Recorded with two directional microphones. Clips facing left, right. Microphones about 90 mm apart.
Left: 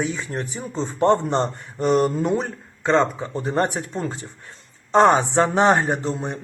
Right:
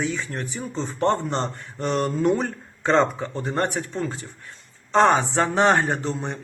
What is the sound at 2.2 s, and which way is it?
Speech, 5° left (ahead or behind).